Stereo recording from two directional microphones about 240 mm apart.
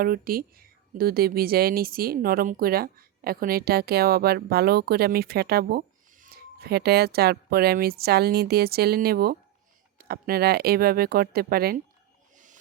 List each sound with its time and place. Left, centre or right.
0.0 s a woman's voice: right